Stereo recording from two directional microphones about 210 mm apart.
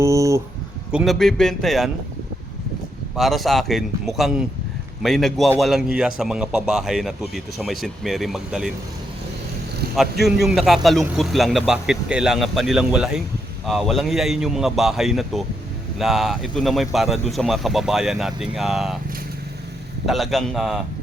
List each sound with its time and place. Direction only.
0.0 s a sound: 15° right (ahead or behind)
0.9 s a man's voice: centre (ahead or behind)
3.2 s a man's voice: centre (ahead or behind)
9.9 s a man's voice: centre (ahead or behind)
20.1 s a man's voice: centre (ahead or behind)